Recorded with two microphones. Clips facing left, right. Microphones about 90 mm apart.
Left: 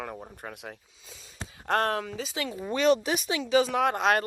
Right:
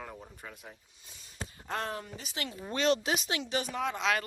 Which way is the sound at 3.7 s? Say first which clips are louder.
Left 7 dB; 65° left (ahead or behind).